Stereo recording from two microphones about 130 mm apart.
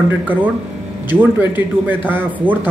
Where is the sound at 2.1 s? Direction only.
15° right (ahead or behind).